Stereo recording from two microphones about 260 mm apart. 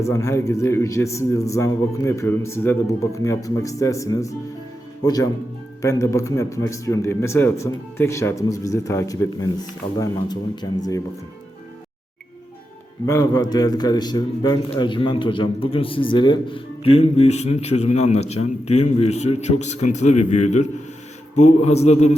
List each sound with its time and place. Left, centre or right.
0.0 s a man's voice: centre
13.1 s a man's voice: centre